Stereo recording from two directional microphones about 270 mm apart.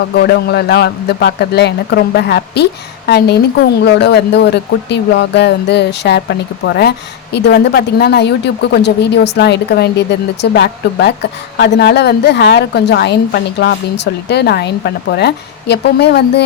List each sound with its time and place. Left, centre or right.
0.1 s a woman's voice: left